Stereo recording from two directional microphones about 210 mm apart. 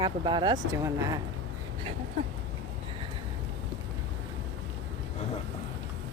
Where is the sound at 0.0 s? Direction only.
20° right (ahead or behind).